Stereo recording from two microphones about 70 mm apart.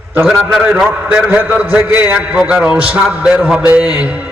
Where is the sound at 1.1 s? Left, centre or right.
Right.